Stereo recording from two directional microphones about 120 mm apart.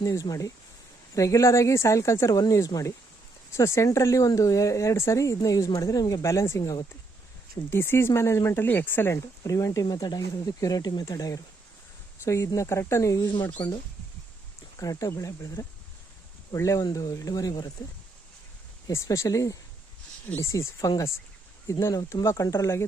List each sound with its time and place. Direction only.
0.0 s speech: 30° left (ahead or behind)
6.6 s speech: 35° left (ahead or behind)
7.7 s speech: 20° left (ahead or behind)
14.8 s speech: 30° left (ahead or behind)